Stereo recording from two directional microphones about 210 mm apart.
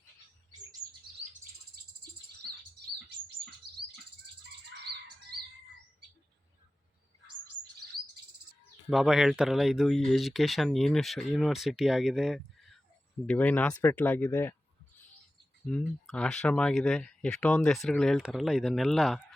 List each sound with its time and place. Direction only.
4.9 s bird: 50° right (ahead or behind)
8.9 s speech: centre (ahead or behind)
15.6 s speech: 5° left (ahead or behind)